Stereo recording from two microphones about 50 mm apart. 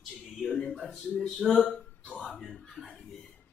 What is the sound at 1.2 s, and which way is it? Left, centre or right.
Speech, centre.